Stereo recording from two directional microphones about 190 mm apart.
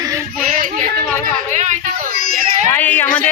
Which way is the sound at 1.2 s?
40° right (ahead or behind).